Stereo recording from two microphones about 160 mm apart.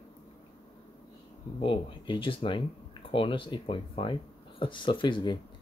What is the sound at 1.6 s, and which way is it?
Speech, 30° left (ahead or behind).